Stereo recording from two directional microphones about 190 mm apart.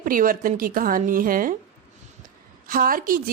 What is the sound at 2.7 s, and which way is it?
Speech, 50° right (ahead or behind).